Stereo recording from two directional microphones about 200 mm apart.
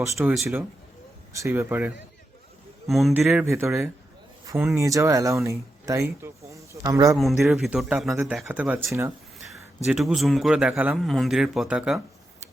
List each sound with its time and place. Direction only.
0.0 s speech: 15° right (ahead or behind)
3.1 s speech: 10° right (ahead or behind)
7.5 s a man's voice: centre (ahead or behind)
9.4 s a man's voice: centre (ahead or behind)